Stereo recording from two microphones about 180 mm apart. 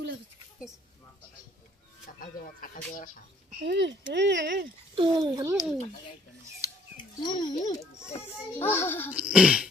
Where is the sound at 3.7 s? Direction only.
80° right.